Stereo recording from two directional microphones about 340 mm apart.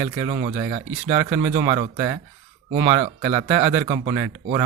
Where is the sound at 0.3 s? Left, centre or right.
Centre.